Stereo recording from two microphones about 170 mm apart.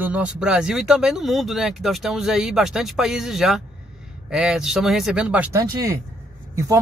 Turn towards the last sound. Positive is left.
turn(degrees=-15)  # may be behind; listen again after turning